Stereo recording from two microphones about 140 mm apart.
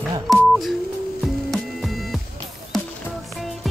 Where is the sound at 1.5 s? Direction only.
Centre (ahead or behind).